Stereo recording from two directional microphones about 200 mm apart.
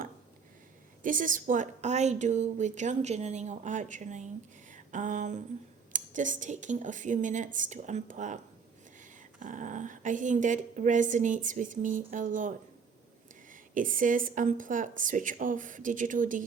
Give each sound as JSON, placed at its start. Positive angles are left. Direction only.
{"t": 1.0, "sound": "a woman's voice", "side_deg": -40}
{"t": 4.7, "sound": "a sound", "side_deg": -40}
{"t": 5.9, "sound": "a woman's voice", "side_deg": -40}
{"t": 9.4, "sound": "a woman's voice", "side_deg": -40}